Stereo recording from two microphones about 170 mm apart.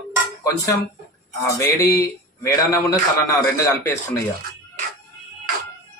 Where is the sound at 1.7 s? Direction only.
15° left (ahead or behind).